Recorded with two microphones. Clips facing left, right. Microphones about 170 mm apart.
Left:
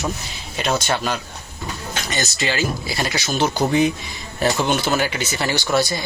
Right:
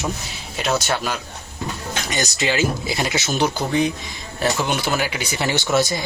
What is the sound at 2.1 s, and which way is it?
Speech, 15° right (ahead or behind).